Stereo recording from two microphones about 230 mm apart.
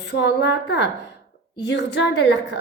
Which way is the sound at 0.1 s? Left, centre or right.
Left.